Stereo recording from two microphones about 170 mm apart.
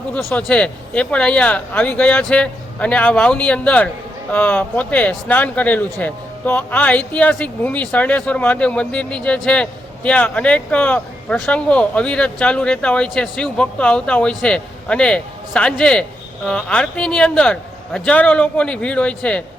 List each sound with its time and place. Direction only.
0.3 s speech: 5° left (ahead or behind)